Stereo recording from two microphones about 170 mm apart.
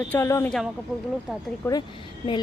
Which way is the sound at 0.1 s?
15° left (ahead or behind).